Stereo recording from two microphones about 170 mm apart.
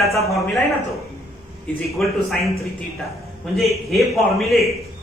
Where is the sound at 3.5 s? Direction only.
Centre (ahead or behind).